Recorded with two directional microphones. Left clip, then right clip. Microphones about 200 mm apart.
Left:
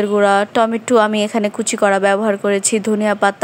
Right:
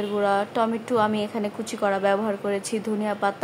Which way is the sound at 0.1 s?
30° left (ahead or behind).